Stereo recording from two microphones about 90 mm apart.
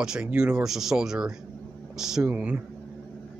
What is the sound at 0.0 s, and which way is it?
Speech, 10° right (ahead or behind).